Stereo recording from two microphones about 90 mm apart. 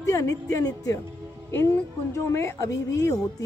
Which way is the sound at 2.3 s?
35° left (ahead or behind).